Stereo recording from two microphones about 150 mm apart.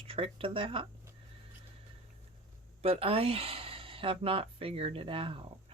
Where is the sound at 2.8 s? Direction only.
40° right (ahead or behind).